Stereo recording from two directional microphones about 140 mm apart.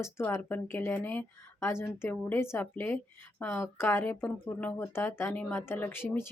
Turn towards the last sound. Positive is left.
turn(degrees=15)  # may be behind; listen again after turning